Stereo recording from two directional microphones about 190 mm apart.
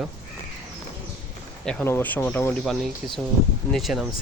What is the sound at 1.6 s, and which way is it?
Speech, 10° left (ahead or behind).